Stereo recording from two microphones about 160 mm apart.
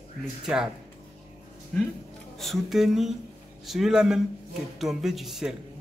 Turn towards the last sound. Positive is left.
turn(degrees=0)  # may be behind; listen again after turning